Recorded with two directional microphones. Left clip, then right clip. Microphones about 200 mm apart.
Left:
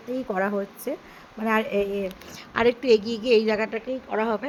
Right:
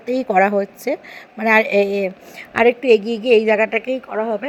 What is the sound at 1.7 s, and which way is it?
A woman's voice, 10° right (ahead or behind).